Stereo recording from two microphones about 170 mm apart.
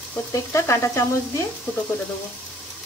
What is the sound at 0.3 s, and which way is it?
Frying, 15° left (ahead or behind).